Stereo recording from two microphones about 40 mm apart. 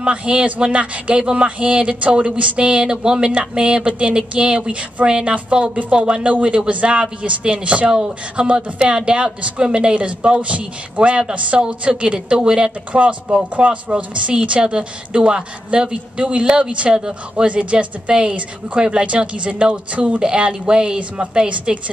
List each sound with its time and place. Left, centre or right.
0.0 s speech: right
17.5 s speech: right